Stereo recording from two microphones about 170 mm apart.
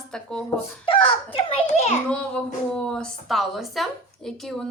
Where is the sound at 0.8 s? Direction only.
35° left (ahead or behind).